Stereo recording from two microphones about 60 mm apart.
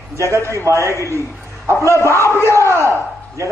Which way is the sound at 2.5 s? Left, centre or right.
Right.